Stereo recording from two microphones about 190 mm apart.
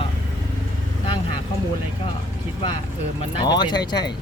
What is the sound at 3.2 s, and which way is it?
Speech, 25° left (ahead or behind).